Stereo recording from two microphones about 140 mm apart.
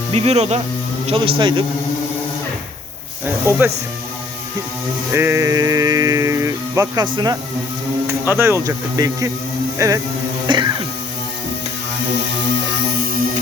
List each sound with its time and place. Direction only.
0.1 s speech: 50° right (ahead or behind)
1.0 s speech: 40° right (ahead or behind)
3.2 s speech: 15° right (ahead or behind)
5.1 s speech: 20° right (ahead or behind)
8.0 s speech: 15° right (ahead or behind)
10.4 s music: 30° right (ahead or behind)